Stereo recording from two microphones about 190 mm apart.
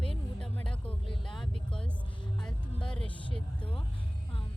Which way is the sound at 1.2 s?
Centre (ahead or behind).